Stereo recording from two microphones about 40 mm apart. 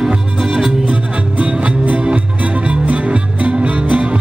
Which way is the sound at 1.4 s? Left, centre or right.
Right.